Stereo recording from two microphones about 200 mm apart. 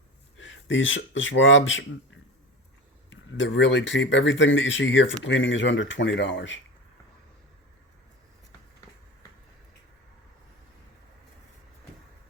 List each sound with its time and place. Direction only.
0.3 s speech: 70° left (ahead or behind)